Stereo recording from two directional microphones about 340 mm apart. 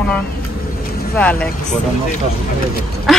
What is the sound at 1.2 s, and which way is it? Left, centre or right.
Speech, centre.